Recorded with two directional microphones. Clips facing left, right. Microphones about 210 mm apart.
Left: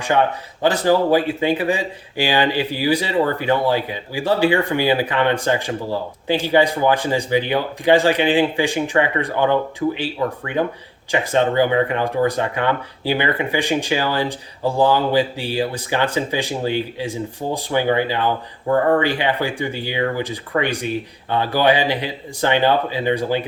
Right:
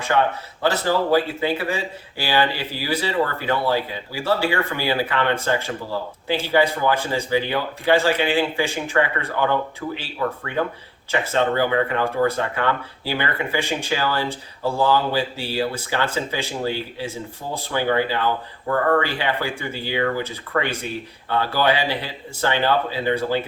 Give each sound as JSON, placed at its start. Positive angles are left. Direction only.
{"t": 0.1, "sound": "speech", "side_deg": 20}